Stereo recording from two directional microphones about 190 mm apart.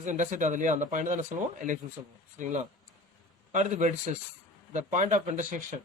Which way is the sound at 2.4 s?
40° right (ahead or behind).